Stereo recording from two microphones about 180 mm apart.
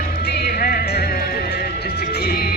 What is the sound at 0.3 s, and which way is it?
Music, 60° left (ahead or behind).